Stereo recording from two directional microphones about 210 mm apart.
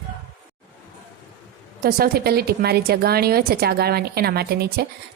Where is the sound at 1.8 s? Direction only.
45° right (ahead or behind).